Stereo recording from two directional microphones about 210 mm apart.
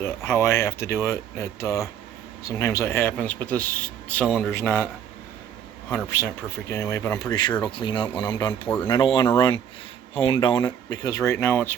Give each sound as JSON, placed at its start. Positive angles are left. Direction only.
{"t": 0.0, "sound": "a man's voice", "side_deg": 10}
{"t": 6.7, "sound": "speech", "side_deg": 15}